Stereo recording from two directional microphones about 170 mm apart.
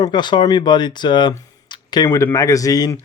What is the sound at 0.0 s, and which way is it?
Speech, 25° left (ahead or behind).